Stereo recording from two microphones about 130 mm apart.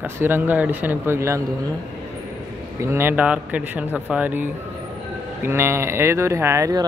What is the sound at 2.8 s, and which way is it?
Speech, 20° right (ahead or behind).